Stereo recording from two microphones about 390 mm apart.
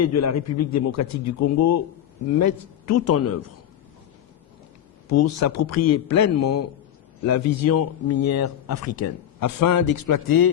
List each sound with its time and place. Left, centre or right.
0.0 s a man's voice: left
5.0 s a man's voice: left